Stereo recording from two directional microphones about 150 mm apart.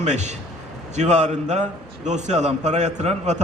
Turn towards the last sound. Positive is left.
turn(degrees=-50)  # may be behind; listen again after turning